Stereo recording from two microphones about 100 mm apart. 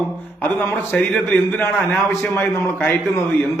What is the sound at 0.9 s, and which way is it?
A man's voice, 5° left (ahead or behind).